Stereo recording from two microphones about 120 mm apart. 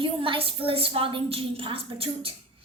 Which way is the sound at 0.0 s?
45° right (ahead or behind).